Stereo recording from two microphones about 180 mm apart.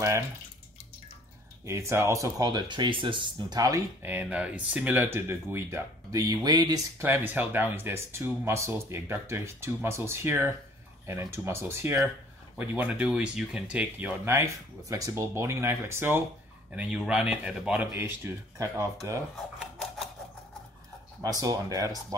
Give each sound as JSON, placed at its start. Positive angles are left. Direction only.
{"t": 1.7, "sound": "speech", "side_deg": -15}
{"t": 19.6, "sound": "a sound", "side_deg": 0}
{"t": 21.2, "sound": "speech", "side_deg": -20}